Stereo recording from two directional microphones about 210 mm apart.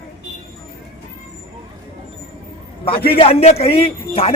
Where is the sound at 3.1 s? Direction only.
30° left (ahead or behind).